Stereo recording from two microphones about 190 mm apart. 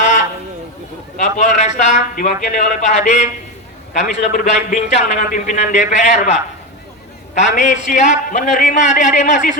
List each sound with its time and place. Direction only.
1.1 s a man's voice: 40° left (ahead or behind)